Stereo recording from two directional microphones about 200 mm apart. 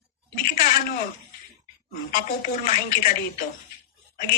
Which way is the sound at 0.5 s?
45° left (ahead or behind).